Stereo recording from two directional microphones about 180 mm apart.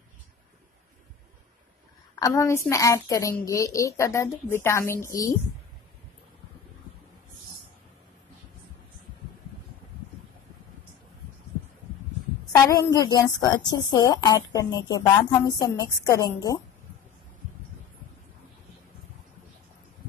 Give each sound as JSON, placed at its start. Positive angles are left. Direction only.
{"t": 2.1, "sound": "a woman's voice", "side_deg": 15}
{"t": 12.6, "sound": "a woman's voice", "side_deg": 20}